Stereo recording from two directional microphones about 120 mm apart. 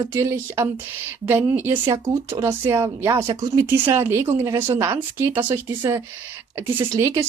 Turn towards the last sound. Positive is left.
turn(degrees=-25)  # may be behind; listen again after turning